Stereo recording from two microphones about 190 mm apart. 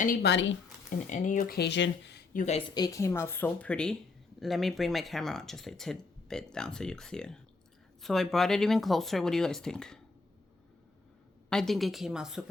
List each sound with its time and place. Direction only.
0.0 s speech: 50° left (ahead or behind)
0.9 s speech: 40° left (ahead or behind); by 2.4 s 60° left (ahead or behind)
2.4 s speech: 30° left (ahead or behind); by 10.0 s 5° left (ahead or behind)
11.4 s speech: 5° left (ahead or behind)